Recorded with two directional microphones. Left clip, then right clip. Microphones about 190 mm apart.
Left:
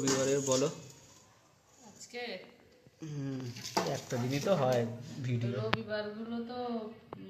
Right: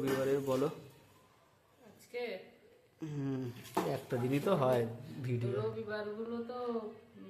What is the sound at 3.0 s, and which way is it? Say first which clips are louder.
Speech: right 2 dB; 15° right (ahead or behind).